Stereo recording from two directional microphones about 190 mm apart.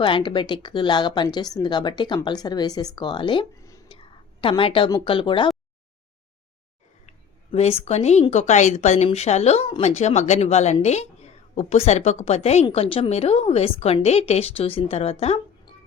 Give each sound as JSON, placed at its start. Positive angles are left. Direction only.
{"t": 0.0, "sound": "speech", "side_deg": 25}
{"t": 3.9, "sound": "a woman's voice", "side_deg": 30}
{"t": 7.5, "sound": "speech", "side_deg": 35}